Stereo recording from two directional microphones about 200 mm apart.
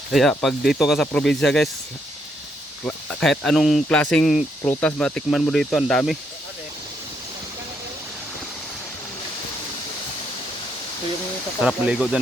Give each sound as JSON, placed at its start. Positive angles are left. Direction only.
{"t": 0.1, "sound": "speech", "side_deg": 0}
{"t": 2.8, "sound": "speech", "side_deg": 5}
{"t": 11.6, "sound": "speech", "side_deg": -5}